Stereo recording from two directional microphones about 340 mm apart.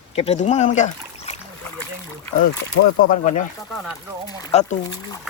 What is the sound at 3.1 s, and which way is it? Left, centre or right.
Speech, left.